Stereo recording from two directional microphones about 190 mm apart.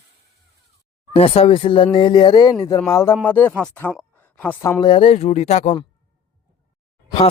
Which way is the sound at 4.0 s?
10° left (ahead or behind).